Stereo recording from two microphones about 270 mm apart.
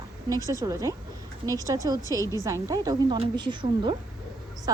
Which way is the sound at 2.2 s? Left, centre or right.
Centre.